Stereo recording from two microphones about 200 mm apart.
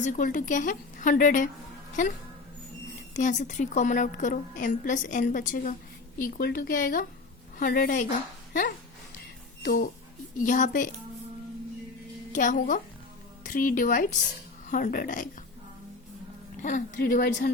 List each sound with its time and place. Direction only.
0.0 s a woman's voice: 40° left (ahead or behind)
3.2 s a woman's voice: 40° left (ahead or behind)
9.6 s a woman's voice: 50° left (ahead or behind)
12.3 s a woman's voice: 40° left (ahead or behind)
16.6 s speech: 45° left (ahead or behind)